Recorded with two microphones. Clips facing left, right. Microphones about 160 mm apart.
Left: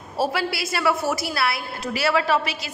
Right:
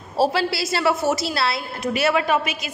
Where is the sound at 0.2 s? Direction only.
30° right (ahead or behind).